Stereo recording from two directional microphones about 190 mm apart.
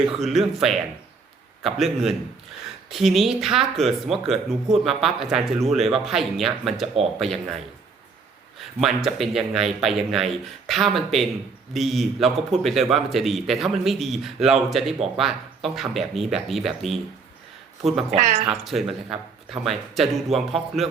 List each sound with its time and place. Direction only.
0.2 s a man's voice: centre (ahead or behind)
8.5 s a man's voice: centre (ahead or behind)
18.1 s speech: 40° right (ahead or behind)
18.6 s a man's voice: centre (ahead or behind)